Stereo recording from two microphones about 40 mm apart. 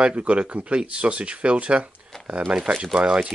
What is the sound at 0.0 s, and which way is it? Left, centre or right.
Speech, right.